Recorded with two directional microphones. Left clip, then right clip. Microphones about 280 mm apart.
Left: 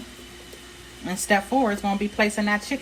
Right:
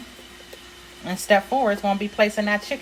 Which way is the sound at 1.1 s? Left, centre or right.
Right.